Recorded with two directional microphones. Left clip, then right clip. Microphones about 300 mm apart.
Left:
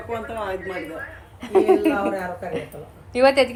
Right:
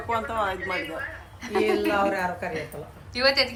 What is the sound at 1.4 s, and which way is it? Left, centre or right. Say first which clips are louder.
Speech: left 7 dB; centre.